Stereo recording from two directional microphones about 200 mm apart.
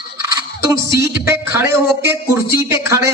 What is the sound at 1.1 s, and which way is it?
Speech, 10° right (ahead or behind).